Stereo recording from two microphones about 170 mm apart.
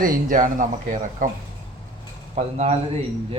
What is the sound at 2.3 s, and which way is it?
Speech, 40° right (ahead or behind).